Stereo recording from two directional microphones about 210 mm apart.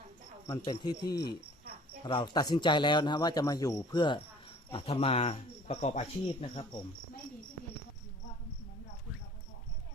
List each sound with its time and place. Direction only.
0.4 s speech: 20° left (ahead or behind)